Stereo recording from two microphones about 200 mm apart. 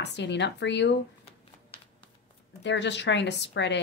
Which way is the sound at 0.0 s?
60° left (ahead or behind).